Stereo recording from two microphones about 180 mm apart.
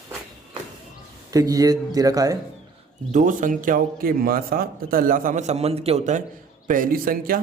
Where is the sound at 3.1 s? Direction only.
45° right (ahead or behind).